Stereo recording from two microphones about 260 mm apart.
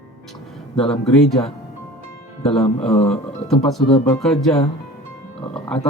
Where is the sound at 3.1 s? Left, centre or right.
Centre.